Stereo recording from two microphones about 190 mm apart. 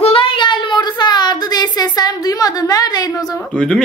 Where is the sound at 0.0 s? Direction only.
30° left (ahead or behind).